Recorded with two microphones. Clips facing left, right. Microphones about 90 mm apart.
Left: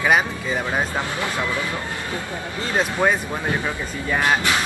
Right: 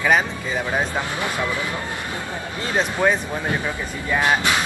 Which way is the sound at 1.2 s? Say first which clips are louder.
Even; 20° right (ahead or behind).